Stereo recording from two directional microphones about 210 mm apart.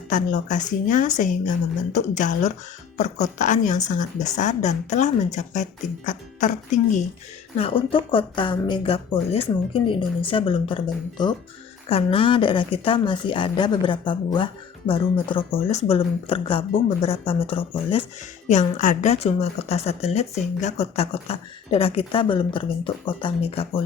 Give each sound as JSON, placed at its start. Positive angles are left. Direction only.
{"t": 0.1, "sound": "speech", "side_deg": 35}
{"t": 7.6, "sound": "a woman's voice", "side_deg": 25}